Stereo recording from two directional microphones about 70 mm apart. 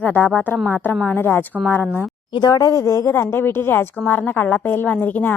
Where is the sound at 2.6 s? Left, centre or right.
Left.